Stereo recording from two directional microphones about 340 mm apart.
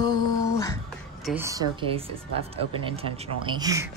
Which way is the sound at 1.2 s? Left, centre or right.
Centre.